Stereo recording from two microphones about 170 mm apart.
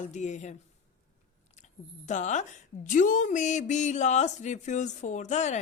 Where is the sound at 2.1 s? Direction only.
45° left (ahead or behind).